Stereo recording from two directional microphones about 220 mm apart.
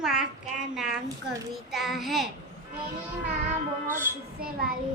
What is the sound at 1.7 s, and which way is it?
Child singing, centre (ahead or behind).